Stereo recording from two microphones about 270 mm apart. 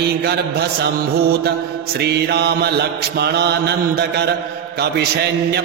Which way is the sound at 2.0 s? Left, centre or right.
Right.